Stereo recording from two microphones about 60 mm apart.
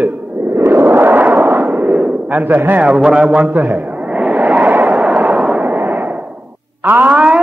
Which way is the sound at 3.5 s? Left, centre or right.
Right.